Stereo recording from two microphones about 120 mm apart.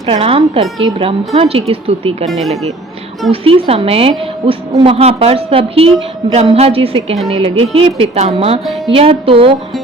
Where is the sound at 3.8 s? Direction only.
55° right (ahead or behind).